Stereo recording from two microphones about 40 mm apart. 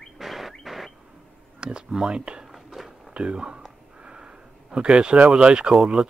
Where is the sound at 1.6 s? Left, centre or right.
Right.